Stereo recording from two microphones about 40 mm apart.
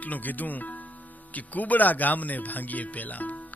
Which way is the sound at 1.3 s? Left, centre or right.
Left.